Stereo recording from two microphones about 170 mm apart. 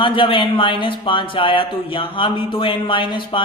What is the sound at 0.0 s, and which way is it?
Speech, 30° left (ahead or behind).